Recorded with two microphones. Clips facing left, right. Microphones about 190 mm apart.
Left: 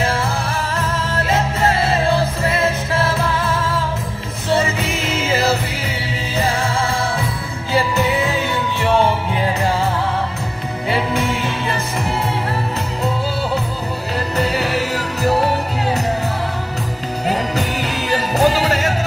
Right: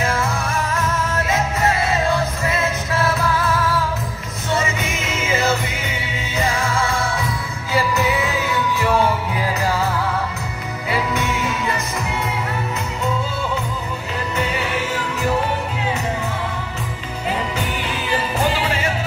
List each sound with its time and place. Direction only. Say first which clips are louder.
1.1 s music: left 2 dB; 30° left (ahead or behind)
10.9 s music: left 2 dB; 30° left (ahead or behind)
14.3 s music: left 4 dB; 35° left (ahead or behind)
17.3 s music: left 3 dB; 40° left (ahead or behind)